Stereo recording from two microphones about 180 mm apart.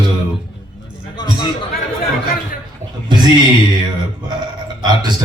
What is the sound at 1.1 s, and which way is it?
Music, 25° left (ahead or behind).